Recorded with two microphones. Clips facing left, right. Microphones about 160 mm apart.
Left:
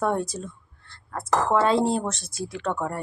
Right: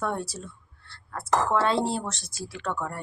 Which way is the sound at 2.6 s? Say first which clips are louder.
Left 4 dB; 30° left (ahead or behind).